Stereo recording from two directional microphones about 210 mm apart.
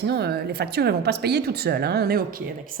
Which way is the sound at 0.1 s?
50° right (ahead or behind).